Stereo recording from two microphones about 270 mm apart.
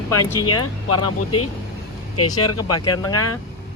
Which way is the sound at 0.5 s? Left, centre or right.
Left.